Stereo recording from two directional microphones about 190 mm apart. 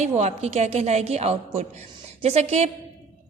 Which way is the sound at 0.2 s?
35° right (ahead or behind).